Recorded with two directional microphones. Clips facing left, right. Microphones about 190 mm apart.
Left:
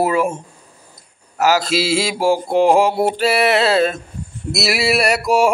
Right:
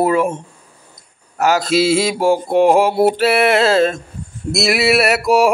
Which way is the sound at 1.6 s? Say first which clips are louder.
Right 5 dB; 50° right (ahead or behind).